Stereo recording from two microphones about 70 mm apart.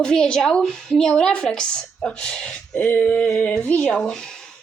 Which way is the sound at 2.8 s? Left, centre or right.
Left.